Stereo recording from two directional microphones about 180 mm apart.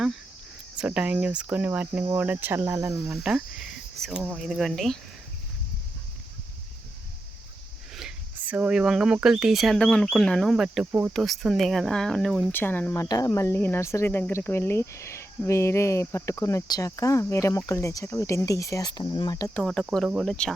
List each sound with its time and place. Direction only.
0.8 s cricket: 5° right (ahead or behind)
3.2 s speech: 5° right (ahead or behind)
7.9 s speech: 5° right (ahead or behind); by 19.5 s 20° left (ahead or behind)
19.5 s speech: 5° left (ahead or behind)